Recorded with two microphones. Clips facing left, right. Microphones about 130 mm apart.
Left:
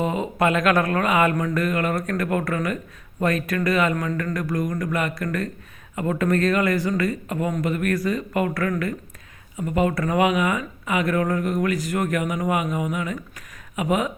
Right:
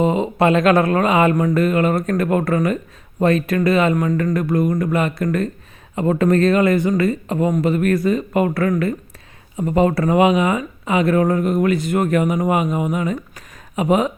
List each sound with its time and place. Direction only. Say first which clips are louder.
0.0 s speech: right 6 dB; 25° right (ahead or behind)